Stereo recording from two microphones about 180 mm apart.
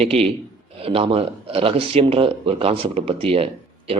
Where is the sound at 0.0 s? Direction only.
35° right (ahead or behind).